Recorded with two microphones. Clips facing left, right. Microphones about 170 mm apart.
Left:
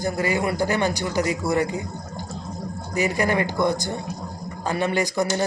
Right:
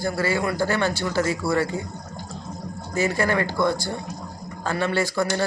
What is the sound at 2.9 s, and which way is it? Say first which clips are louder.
A man's voice: even; 15° left (ahead or behind).